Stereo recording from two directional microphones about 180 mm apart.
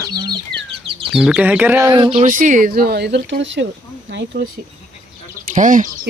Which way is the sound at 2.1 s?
45° right (ahead or behind).